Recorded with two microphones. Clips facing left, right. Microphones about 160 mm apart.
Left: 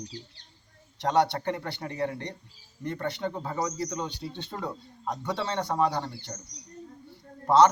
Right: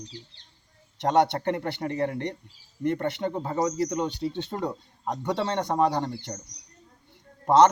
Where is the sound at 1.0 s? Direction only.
20° right (ahead or behind).